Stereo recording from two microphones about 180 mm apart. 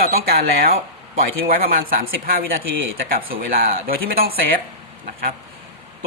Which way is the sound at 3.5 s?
55° right (ahead or behind).